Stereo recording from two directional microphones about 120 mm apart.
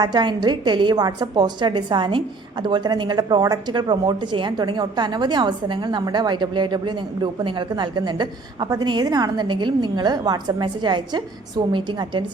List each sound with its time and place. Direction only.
0.0 s a woman's voice: 40° right (ahead or behind)